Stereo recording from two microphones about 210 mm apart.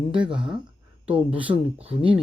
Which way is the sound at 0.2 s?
25° right (ahead or behind).